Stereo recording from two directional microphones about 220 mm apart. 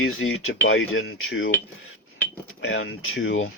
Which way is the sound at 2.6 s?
60° left (ahead or behind).